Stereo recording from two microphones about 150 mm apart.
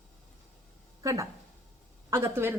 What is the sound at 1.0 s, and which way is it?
A woman's voice, 20° right (ahead or behind).